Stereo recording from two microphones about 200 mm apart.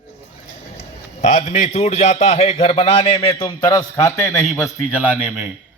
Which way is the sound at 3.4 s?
15° left (ahead or behind).